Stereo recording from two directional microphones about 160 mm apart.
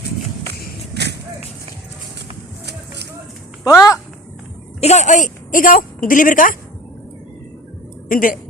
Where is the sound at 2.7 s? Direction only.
90° right.